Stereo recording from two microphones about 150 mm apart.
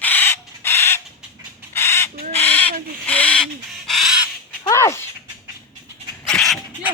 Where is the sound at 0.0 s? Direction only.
15° left (ahead or behind).